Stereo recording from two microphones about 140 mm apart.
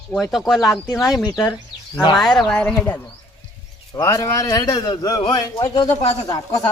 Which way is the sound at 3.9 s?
25° left (ahead or behind).